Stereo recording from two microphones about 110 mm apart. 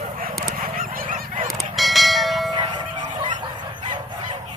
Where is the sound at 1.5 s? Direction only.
Centre (ahead or behind).